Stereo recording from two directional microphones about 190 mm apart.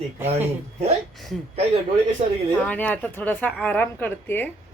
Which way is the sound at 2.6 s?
10° left (ahead or behind).